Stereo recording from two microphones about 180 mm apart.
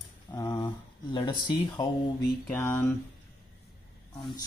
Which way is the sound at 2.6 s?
10° left (ahead or behind).